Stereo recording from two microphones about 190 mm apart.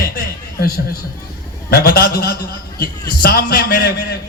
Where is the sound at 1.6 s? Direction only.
55° left (ahead or behind).